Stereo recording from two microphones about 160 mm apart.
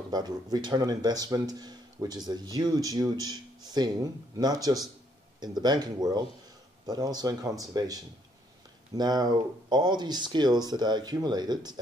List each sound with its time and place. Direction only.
0.1 s speech: 25° right (ahead or behind)